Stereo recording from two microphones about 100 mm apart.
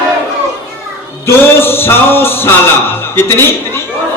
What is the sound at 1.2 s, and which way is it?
Music, 25° left (ahead or behind).